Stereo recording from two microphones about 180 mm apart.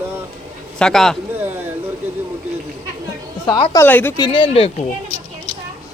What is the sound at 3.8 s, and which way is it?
Speech, 10° left (ahead or behind).